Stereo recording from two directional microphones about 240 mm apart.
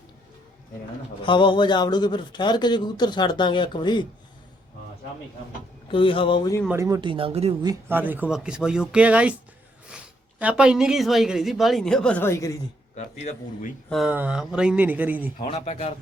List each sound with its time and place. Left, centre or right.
1.2 s a man's voice: centre
5.9 s a man's voice: left
6.7 s a woman's voice: centre
10.4 s a woman's voice: centre
13.2 s speech: left
13.9 s speech: centre
15.4 s a man's voice: left